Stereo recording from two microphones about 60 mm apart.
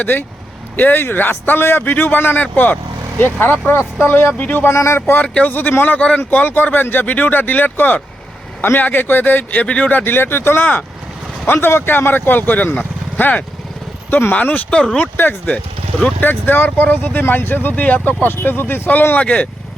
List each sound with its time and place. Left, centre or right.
0.0 s speech: left
4.0 s speech: left
4.7 s speech: left
5.2 s speech: left
14.1 s speech: left
14.3 s speech: left